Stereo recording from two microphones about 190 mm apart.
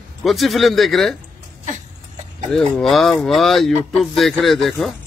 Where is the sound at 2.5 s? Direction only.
Centre (ahead or behind).